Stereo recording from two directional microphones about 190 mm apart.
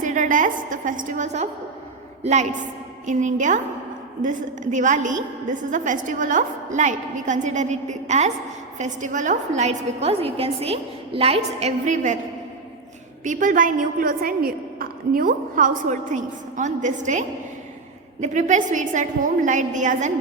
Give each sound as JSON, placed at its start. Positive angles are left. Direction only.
{"t": 0.0, "sound": "a woman's voice", "side_deg": -40}
{"t": 13.2, "sound": "a woman's voice", "side_deg": -45}